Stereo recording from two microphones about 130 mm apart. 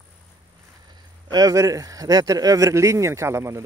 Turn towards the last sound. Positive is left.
turn(degrees=-20)  # may be behind; listen again after turning